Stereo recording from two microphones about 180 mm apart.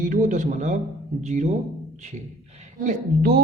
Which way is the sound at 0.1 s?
45° right (ahead or behind).